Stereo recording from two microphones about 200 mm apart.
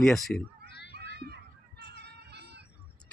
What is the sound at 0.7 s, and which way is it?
Children playing, 55° left (ahead or behind).